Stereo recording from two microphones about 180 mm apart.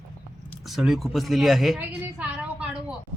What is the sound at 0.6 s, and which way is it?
Speech, centre (ahead or behind).